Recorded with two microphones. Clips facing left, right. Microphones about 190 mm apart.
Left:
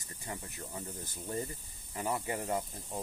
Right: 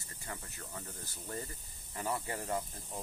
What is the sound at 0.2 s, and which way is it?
Speech, 20° left (ahead or behind).